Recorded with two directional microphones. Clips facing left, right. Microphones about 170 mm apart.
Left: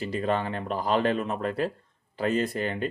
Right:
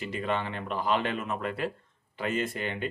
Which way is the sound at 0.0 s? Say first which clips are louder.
Left 4 dB; 35° left (ahead or behind).